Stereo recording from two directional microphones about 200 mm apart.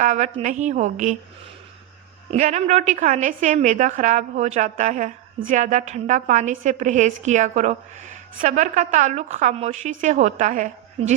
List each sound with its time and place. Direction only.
0.0 s a woman's voice: 35° right (ahead or behind)
2.3 s a woman's voice: 35° right (ahead or behind)